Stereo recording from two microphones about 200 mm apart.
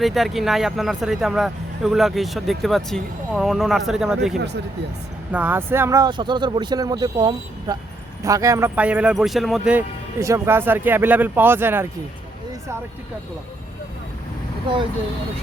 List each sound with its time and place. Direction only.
0.0 s speech: centre (ahead or behind)